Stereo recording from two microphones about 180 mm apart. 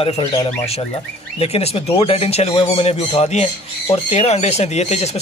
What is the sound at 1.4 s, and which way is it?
A man's voice, 35° left (ahead or behind).